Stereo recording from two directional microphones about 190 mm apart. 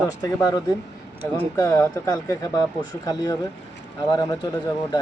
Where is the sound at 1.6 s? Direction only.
15° left (ahead or behind).